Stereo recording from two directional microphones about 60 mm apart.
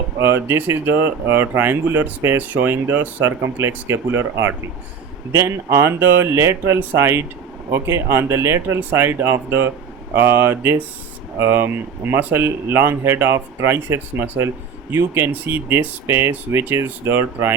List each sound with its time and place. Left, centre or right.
0.2 s speech: right